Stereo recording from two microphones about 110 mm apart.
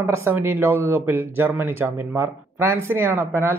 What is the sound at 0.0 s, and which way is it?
A man's voice, 20° right (ahead or behind).